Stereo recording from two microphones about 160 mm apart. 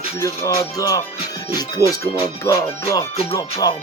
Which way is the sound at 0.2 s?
20° left (ahead or behind).